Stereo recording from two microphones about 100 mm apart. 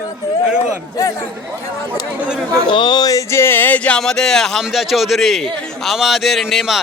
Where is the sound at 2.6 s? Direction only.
50° left (ahead or behind).